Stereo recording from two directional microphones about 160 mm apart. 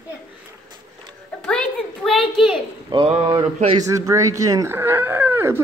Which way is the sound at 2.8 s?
30° right (ahead or behind).